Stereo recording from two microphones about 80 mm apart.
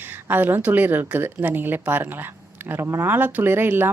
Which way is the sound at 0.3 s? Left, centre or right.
Right.